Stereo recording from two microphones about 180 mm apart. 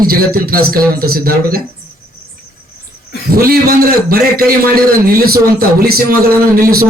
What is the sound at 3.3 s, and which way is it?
A man's voice, 55° right (ahead or behind).